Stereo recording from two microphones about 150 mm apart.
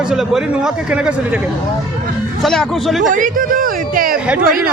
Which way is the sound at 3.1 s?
65° right (ahead or behind).